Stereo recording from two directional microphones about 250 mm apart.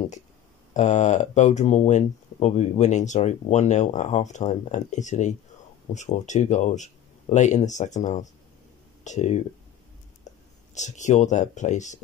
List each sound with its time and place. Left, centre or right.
0.7 s speech: left
10.7 s speech: left